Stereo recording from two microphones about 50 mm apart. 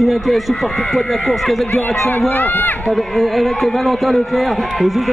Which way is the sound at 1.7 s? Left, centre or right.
Left.